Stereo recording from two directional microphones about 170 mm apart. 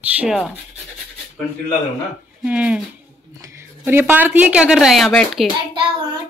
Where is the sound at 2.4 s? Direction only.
5° right (ahead or behind).